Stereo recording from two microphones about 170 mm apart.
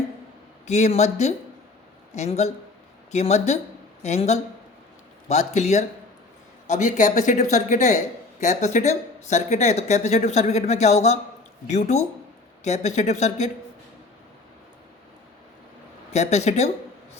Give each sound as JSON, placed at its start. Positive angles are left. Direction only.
{"t": 0.7, "sound": "speech", "side_deg": 40}
{"t": 16.1, "sound": "speech", "side_deg": 40}